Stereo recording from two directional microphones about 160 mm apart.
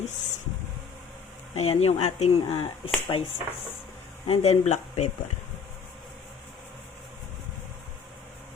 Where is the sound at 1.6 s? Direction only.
40° left (ahead or behind).